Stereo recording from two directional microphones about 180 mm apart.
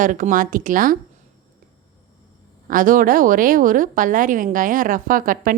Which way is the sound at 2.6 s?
50° right (ahead or behind).